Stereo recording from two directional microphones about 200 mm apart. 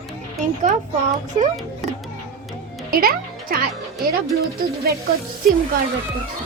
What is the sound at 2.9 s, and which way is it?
Speech, 45° right (ahead or behind).